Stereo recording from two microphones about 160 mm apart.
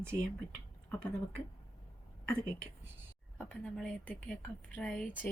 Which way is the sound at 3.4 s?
5° left (ahead or behind).